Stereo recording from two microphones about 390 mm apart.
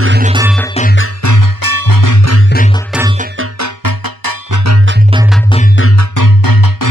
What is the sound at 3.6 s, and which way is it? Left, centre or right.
Music, right.